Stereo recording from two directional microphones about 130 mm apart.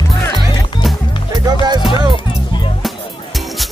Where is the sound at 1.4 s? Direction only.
35° right (ahead or behind).